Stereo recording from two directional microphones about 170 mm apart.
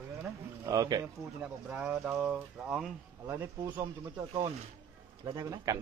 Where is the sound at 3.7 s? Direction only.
30° right (ahead or behind).